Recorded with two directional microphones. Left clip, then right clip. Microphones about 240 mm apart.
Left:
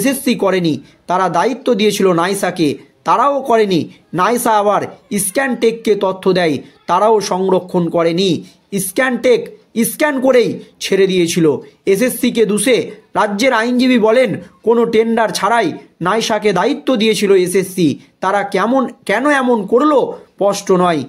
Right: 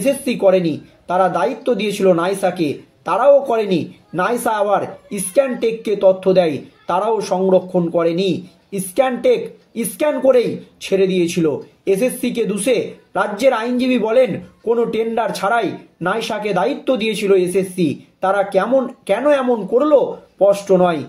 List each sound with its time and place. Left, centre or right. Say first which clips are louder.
0.0 s speech: even; left